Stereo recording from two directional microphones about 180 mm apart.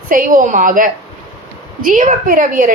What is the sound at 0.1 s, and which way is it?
A woman's voice, 50° right (ahead or behind).